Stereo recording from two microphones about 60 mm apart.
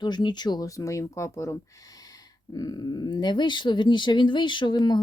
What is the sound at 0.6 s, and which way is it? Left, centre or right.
Speech, left.